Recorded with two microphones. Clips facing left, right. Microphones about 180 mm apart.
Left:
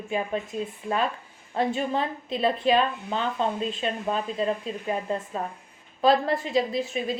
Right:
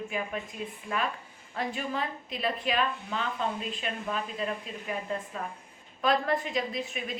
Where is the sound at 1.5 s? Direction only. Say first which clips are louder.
Left 7 dB; 30° left (ahead or behind).